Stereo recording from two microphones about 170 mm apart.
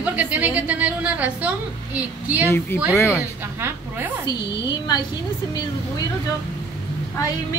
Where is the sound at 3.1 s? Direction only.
10° right (ahead or behind).